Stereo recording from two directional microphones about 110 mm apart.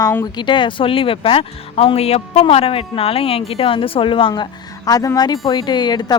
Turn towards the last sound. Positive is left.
turn(degrees=40)  # may be behind; listen again after turning